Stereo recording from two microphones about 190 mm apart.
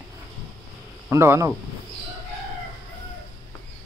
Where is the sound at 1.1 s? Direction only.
15° right (ahead or behind).